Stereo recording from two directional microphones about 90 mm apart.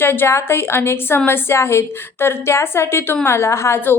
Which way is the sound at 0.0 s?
25° left (ahead or behind).